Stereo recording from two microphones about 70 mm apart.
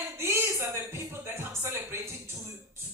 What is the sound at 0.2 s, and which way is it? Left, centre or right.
Music, right.